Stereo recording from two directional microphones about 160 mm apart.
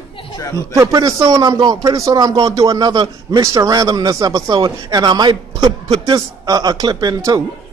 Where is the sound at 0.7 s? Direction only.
25° right (ahead or behind).